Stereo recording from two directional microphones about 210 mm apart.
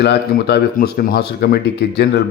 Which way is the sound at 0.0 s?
50° left (ahead or behind).